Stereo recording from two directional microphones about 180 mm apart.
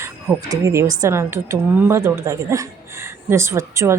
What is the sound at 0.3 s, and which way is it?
A woman's voice, 15° right (ahead or behind).